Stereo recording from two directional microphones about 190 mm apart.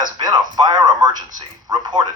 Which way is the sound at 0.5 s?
20° right (ahead or behind).